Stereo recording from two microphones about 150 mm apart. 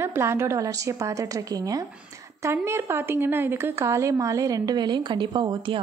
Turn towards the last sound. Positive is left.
turn(degrees=-35)  # may be behind; listen again after turning